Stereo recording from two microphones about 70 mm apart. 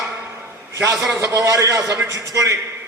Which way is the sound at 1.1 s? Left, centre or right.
Right.